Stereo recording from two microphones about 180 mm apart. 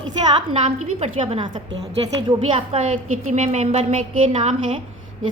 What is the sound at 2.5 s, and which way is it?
A woman's voice, 40° right (ahead or behind).